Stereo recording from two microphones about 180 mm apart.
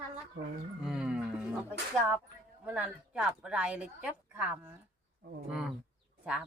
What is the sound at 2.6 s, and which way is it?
Speech, 5° right (ahead or behind).